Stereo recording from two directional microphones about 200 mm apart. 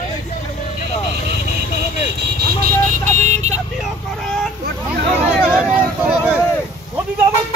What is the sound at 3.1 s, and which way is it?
Vehicle, 35° right (ahead or behind).